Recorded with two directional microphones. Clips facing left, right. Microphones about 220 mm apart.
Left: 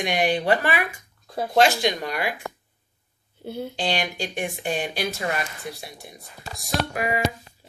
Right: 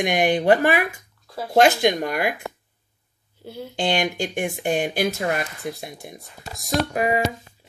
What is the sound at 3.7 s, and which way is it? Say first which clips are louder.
Speech: right 6 dB; 50° right (ahead or behind).